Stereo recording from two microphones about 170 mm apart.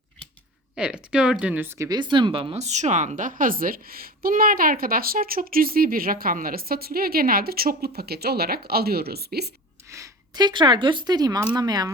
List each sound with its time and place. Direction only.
0.8 s speech: 5° right (ahead or behind); by 9.5 s 70° right (ahead or behind)
9.9 s speech: 20° right (ahead or behind)